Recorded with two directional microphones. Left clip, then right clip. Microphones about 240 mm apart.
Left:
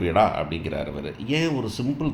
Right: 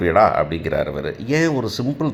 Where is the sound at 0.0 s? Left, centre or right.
Centre.